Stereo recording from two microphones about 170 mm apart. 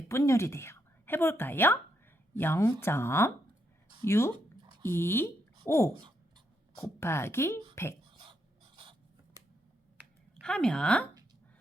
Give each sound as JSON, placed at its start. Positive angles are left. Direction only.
{"t": 0.1, "sound": "a woman's voice", "side_deg": 15}
{"t": 8.0, "sound": "a sound", "side_deg": -30}
{"t": 10.4, "sound": "a woman's voice", "side_deg": 5}